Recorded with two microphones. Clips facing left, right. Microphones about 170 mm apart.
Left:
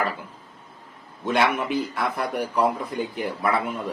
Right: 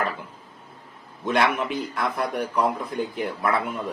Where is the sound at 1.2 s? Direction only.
Centre (ahead or behind).